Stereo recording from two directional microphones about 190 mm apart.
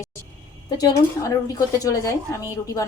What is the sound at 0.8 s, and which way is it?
A woman's voice, 20° left (ahead or behind).